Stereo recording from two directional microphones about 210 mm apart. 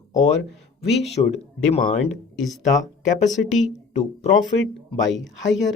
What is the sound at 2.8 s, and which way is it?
Speech, 35° left (ahead or behind).